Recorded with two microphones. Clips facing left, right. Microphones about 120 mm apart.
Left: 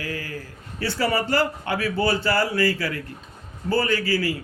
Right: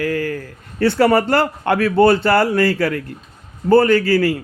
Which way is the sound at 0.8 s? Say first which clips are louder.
Right 10 dB; 60° right (ahead or behind).